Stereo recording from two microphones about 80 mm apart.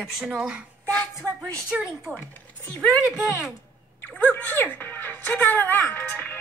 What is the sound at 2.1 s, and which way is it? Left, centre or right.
Speech, left.